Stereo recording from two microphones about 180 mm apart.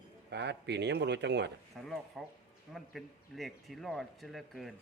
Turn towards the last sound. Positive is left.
turn(degrees=0)  # may be behind; listen again after turning